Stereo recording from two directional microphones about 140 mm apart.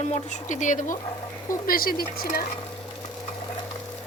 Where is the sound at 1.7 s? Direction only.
90° left.